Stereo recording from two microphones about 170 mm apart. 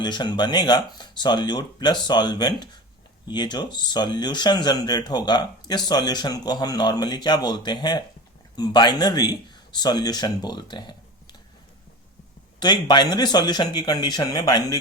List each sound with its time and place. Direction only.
0.0 s speech: 25° left (ahead or behind)
12.5 s speech: 25° left (ahead or behind)